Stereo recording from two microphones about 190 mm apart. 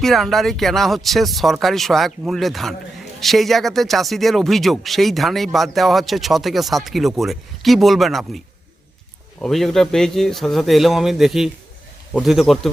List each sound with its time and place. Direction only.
0.0 s speech: centre (ahead or behind)
9.4 s speech: centre (ahead or behind)